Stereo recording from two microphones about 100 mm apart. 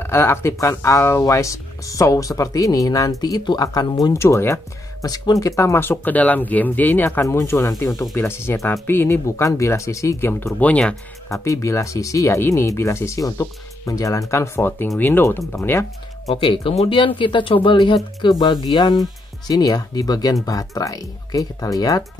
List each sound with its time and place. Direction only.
0.0 s speech: 25° left (ahead or behind)
5.0 s speech: 40° left (ahead or behind)
5.6 s speech: 25° left (ahead or behind)
10.6 s speech: 10° left (ahead or behind)
11.2 s speech: 30° left (ahead or behind)
16.3 s speech: 60° left (ahead or behind); by 22.0 s 40° left (ahead or behind)